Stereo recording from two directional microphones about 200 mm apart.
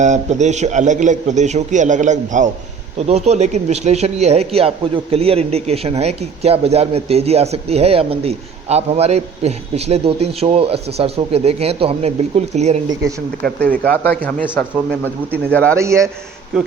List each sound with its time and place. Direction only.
0.0 s speech: 35° right (ahead or behind)
13.8 s speech: 5° left (ahead or behind)
15.7 s a man's voice: 15° right (ahead or behind)